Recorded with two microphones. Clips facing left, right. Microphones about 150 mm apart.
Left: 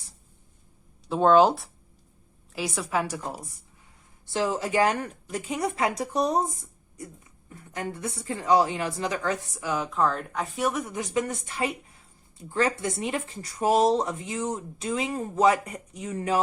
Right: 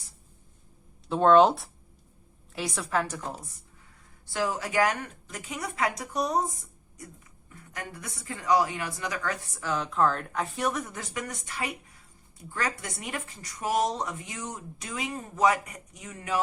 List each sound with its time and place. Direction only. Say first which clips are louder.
1.0 s a woman's voice: even; centre (ahead or behind)
4.3 s speech: left 4 dB; 25° left (ahead or behind)
7.5 s speech: left 7 dB; 30° left (ahead or behind)
9.6 s speech: even; 5° left (ahead or behind); by 16.4 s 30° left (ahead or behind)